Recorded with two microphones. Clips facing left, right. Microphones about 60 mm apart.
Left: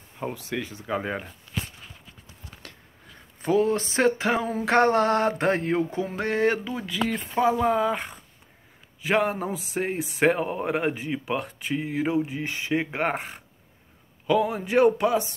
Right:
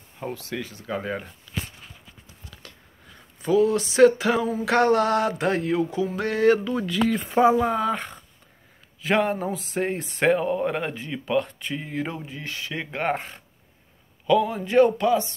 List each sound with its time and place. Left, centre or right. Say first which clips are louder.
0.3 s speech: right 1 dB; left
3.4 s a sound: right 2 dB; left
6.2 s speech: right 4 dB; left
6.7 s speech: right 4 dB; centre
10.4 s speech: right 1 dB; centre
12.4 s speech: left 5 dB; left
14.4 s speech: left 1 dB; centre